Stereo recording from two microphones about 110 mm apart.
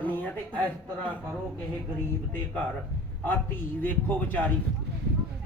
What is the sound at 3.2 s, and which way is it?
A man's voice, 15° left (ahead or behind).